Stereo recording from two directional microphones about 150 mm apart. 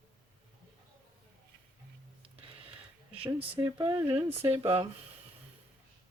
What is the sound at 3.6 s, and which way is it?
Speech, 25° right (ahead or behind).